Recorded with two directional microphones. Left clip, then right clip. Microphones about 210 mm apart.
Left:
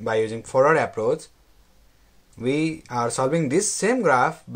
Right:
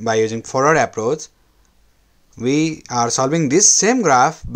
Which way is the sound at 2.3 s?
45° right (ahead or behind).